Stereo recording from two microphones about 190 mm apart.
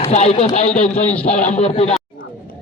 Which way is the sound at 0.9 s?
5° left (ahead or behind).